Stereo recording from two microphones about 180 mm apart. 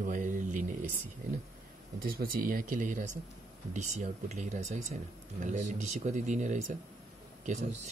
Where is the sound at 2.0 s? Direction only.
55° right (ahead or behind).